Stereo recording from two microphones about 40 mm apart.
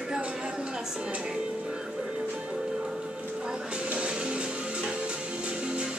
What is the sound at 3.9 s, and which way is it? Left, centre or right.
Music, right.